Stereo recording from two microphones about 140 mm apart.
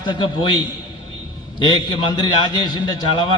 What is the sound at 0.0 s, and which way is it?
A man's voice, 35° left (ahead or behind).